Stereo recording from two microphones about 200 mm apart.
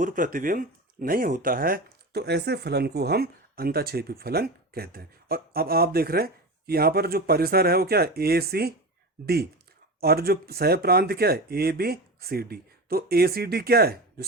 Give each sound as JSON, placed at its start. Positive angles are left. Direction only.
{"t": 0.0, "sound": "speech", "side_deg": -40}